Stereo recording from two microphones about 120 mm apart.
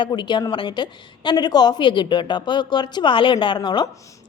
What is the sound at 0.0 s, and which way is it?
A woman's voice, 40° left (ahead or behind).